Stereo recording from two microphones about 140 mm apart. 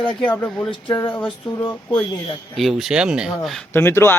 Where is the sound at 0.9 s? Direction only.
30° left (ahead or behind).